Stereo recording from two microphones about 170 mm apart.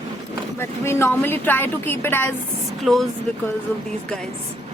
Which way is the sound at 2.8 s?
Centre (ahead or behind).